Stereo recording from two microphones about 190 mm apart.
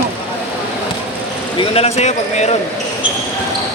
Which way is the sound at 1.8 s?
35° left (ahead or behind).